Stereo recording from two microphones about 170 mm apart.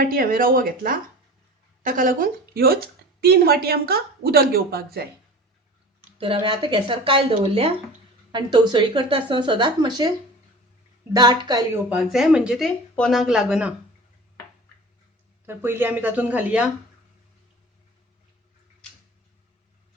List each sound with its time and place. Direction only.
0.0 s a woman's voice: 55° right (ahead or behind)
6.1 s speech: 30° right (ahead or behind)
11.1 s speech: 25° right (ahead or behind)
11.9 s speech: 5° right (ahead or behind)
15.4 s speech: 15° right (ahead or behind)